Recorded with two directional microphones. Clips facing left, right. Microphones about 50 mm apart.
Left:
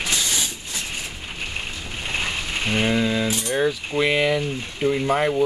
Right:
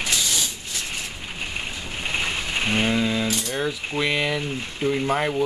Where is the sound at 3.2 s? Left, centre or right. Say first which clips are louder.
Left 3 dB; centre.